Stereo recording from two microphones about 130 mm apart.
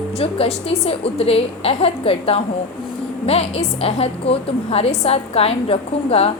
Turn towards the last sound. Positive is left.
turn(degrees=50)  # may be behind; listen again after turning